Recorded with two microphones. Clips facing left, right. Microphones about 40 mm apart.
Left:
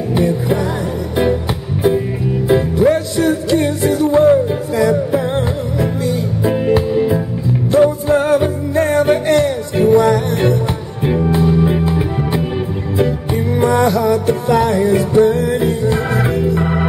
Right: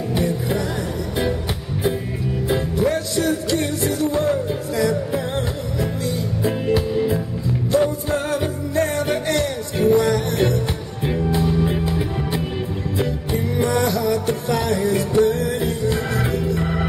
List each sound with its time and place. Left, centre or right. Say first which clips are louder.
0.1 s music: left 7 dB; centre
2.4 s music: left 8 dB; centre